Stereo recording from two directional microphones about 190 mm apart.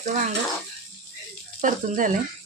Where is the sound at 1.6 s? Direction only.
45° right (ahead or behind).